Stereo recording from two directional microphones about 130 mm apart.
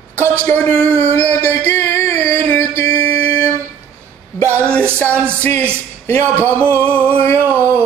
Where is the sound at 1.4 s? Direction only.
15° left (ahead or behind).